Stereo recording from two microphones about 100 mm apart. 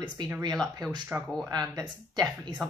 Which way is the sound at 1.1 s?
15° right (ahead or behind).